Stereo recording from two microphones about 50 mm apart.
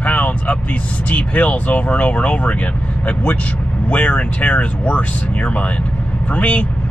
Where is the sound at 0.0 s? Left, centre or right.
Left.